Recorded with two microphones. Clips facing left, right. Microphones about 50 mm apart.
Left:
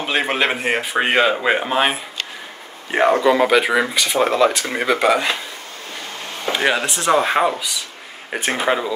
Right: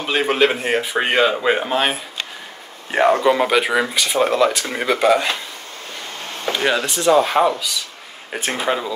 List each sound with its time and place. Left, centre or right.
0.1 s speech: centre
3.9 s speech: centre
4.6 s speech: centre
6.4 s speech: centre